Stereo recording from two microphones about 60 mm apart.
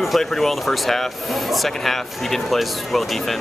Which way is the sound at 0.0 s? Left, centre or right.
Centre.